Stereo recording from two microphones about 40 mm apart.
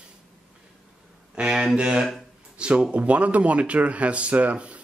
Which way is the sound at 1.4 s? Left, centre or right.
Centre.